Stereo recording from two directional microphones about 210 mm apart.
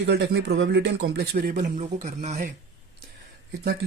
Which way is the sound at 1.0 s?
50° right (ahead or behind).